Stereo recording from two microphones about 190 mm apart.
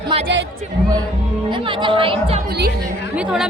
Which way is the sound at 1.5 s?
25° right (ahead or behind).